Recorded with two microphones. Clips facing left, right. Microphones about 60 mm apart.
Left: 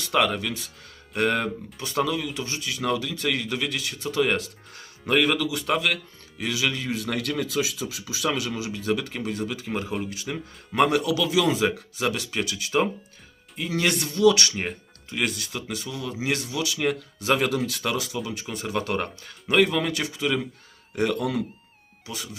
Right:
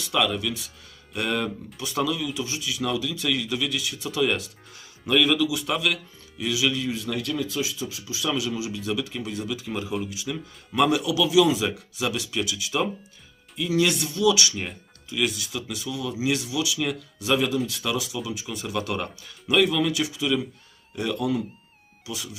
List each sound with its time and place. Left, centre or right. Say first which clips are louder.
0.0 s speech: left 1 dB; left
6.9 s speech: left 1 dB; left
8.3 s speech: right 2 dB; left
10.2 s speech: even; left
10.8 s speech: right 3 dB; left
18.5 s speech: left 2 dB; left
20.9 s speech: left 1 dB; left
22.0 s speech: right 1 dB; left